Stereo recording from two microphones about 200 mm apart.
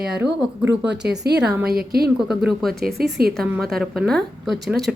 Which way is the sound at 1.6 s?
50° right (ahead or behind).